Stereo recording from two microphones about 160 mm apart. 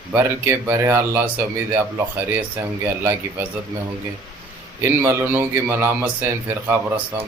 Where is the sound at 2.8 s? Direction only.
15° right (ahead or behind).